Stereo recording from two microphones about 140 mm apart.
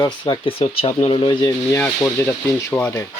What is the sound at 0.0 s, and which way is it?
Speech, 30° left (ahead or behind).